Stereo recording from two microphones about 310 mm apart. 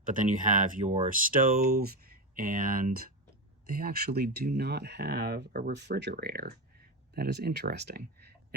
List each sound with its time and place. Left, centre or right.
0.0 s speech: right